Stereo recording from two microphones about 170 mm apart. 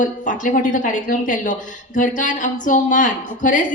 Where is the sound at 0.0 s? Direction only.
50° left (ahead or behind).